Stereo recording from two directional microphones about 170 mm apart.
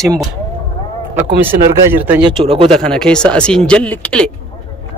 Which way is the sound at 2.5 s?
35° right (ahead or behind).